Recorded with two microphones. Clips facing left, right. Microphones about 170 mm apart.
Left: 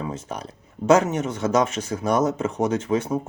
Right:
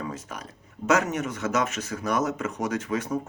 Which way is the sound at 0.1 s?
35° left (ahead or behind).